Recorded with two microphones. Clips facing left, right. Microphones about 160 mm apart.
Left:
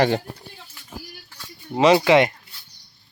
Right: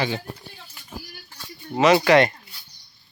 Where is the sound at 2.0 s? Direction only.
20° left (ahead or behind).